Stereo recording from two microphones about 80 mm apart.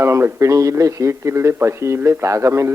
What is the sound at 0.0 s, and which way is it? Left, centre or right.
A man's voice, right.